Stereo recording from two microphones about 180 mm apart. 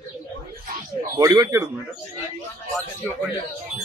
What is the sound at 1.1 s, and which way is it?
Speech, 20° right (ahead or behind).